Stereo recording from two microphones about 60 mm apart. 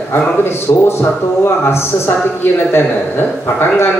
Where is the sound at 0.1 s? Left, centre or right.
Left.